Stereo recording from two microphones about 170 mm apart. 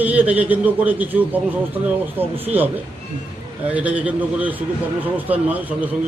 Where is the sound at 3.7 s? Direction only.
10° right (ahead or behind).